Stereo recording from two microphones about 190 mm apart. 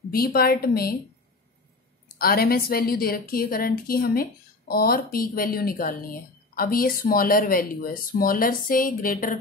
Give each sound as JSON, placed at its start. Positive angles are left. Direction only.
{"t": 0.1, "sound": "a woman's voice", "side_deg": 50}
{"t": 2.1, "sound": "a woman's voice", "side_deg": 50}